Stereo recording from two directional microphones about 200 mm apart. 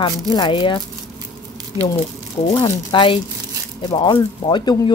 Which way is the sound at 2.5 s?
20° left (ahead or behind).